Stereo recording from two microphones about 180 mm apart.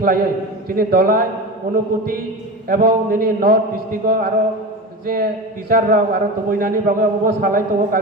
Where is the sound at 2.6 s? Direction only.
60° right (ahead or behind).